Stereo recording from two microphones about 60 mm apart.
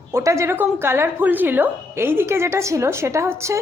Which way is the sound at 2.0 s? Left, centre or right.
Right.